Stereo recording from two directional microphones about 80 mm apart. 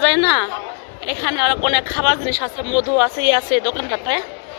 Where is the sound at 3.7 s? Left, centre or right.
Right.